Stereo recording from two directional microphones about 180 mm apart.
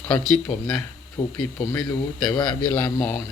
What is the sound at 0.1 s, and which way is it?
Speech, 5° left (ahead or behind).